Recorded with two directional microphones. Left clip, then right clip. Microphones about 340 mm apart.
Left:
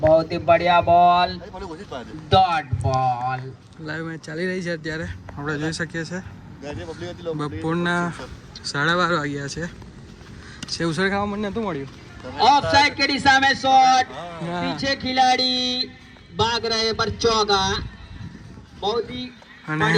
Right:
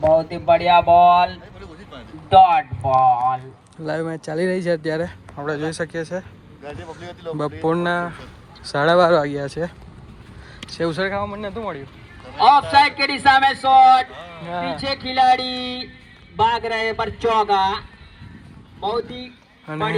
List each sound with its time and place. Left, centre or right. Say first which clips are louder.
0.1 s a man's voice: right 1 dB; right
3.8 s speech: right 6 dB; centre
6.7 s a man's voice: left 2 dB; centre
7.6 s speech: right 3 dB; centre
12.5 s a man's voice: right 3 dB; centre
14.2 s a sound: left 3 dB; left
14.4 s speech: right 2 dB; centre
14.9 s a man's voice: right 3 dB; centre
19.6 s speech: left 2 dB; centre